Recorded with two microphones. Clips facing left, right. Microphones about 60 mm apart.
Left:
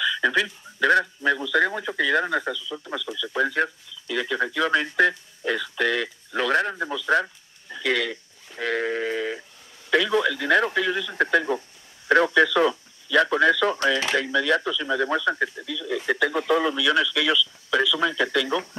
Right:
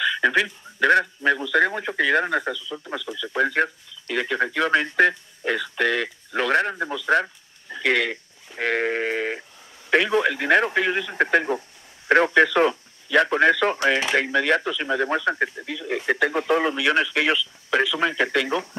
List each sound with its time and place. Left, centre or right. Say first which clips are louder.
0.0 s a sound: right 2 dB; right
1.8 s speech: right 2 dB; right
2.7 s speech: right 1 dB; centre
3.2 s a man's voice: right 2 dB; right
8.5 s sheep: right 2 dB; right
9.8 s radio: right 1 dB; right
14.1 s speech: right 2 dB; right
15.6 s radio: right 1 dB; right